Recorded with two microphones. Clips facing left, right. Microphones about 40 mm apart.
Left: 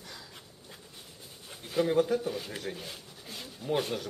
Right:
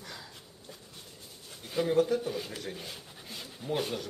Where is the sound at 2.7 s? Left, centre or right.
Centre.